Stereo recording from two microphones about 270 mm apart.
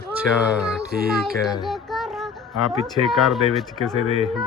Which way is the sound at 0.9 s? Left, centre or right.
Right.